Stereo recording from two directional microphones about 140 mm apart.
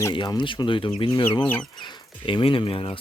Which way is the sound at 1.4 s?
15° left (ahead or behind).